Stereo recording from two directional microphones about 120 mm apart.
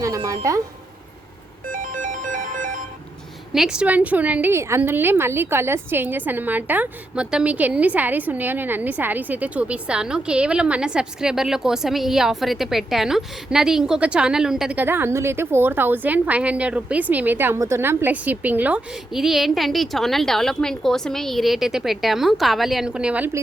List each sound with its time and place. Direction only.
0.0 s speech: 30° right (ahead or behind)
1.8 s music: 90° right
3.5 s a woman's voice: 5° right (ahead or behind)
14.8 s a woman's voice: 15° right (ahead or behind)